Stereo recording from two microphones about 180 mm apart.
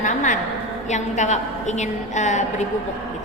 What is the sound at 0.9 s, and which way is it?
A woman's voice, 40° left (ahead or behind).